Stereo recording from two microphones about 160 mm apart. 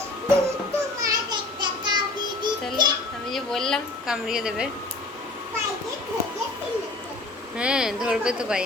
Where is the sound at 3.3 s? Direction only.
5° left (ahead or behind).